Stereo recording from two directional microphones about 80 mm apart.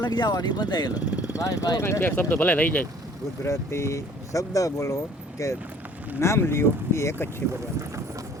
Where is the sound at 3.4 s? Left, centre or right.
Left.